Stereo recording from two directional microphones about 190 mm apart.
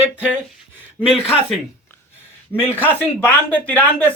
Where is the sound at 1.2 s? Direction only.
30° left (ahead or behind).